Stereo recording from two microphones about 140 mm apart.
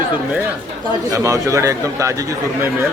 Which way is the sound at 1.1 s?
20° right (ahead or behind).